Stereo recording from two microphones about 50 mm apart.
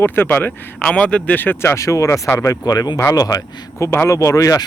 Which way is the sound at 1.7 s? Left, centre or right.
Left.